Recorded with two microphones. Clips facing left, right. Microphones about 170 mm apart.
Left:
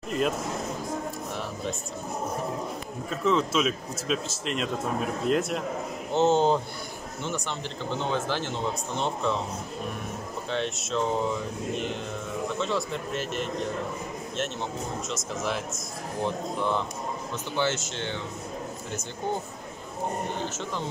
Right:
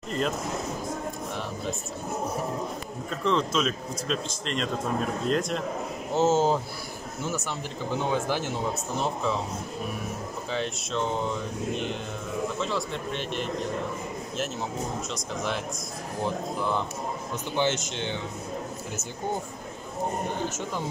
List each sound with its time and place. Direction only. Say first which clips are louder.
3.1 s speech: left 1 dB; 5° left (ahead or behind)
10.5 s speech: left 2 dB; centre (ahead or behind)
15.0 s speech: even; centre (ahead or behind)
17.6 s speech: right 1 dB; 20° right (ahead or behind)
20.4 s speech: right 1 dB; 10° right (ahead or behind)